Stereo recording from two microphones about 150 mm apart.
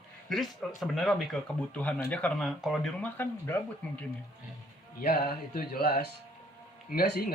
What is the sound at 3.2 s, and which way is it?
Speech, 10° left (ahead or behind).